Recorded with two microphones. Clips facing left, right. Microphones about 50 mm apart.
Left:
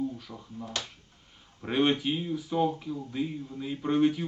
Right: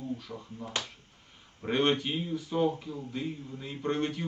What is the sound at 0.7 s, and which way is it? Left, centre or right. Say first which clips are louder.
Speech: right 2 dB; right.